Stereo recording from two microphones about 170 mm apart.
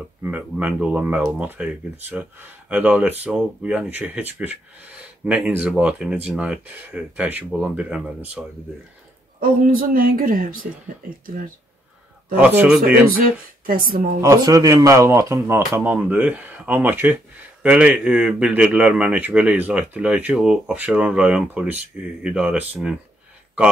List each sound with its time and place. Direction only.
0.2 s speech: 10° right (ahead or behind)
9.4 s a woman's voice: 55° right (ahead or behind)
12.4 s speech: 5° right (ahead or behind)
13.1 s a woman's voice: 55° right (ahead or behind)
14.2 s speech: 20° right (ahead or behind)